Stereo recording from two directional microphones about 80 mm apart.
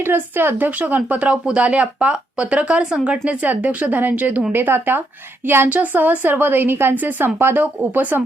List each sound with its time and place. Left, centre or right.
0.0 s a woman's voice: right